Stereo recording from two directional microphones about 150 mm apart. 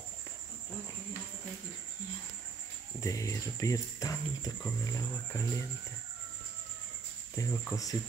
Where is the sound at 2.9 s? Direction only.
20° left (ahead or behind).